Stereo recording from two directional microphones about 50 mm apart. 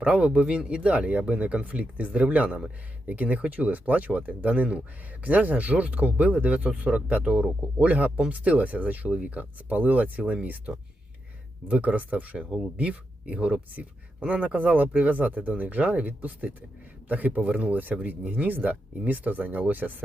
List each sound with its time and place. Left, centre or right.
0.0 s speech: right
11.7 s speech: right